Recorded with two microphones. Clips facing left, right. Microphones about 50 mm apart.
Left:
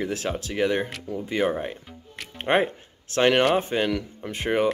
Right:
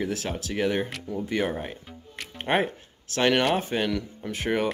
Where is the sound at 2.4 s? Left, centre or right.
Left.